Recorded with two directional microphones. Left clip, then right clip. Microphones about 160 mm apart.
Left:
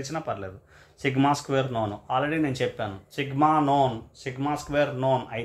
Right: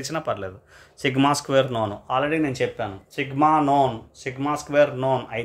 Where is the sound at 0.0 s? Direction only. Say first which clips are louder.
Right 4 dB; 45° right (ahead or behind).